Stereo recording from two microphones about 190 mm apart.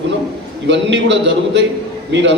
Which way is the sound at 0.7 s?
65° right (ahead or behind).